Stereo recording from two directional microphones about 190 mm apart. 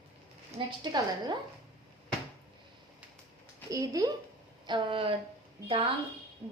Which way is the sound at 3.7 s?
20° right (ahead or behind).